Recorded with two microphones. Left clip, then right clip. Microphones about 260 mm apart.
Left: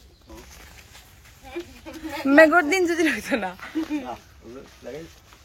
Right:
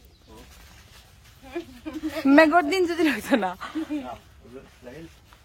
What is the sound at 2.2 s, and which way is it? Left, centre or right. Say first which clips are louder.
Speech: left 2 dB; centre.